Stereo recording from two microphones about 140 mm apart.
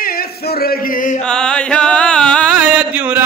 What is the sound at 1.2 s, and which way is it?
Music, 5° left (ahead or behind).